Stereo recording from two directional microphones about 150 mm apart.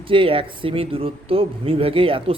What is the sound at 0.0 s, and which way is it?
Speech, 35° right (ahead or behind).